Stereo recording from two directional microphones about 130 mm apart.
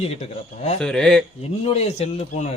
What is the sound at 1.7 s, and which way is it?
Speech, 55° left (ahead or behind).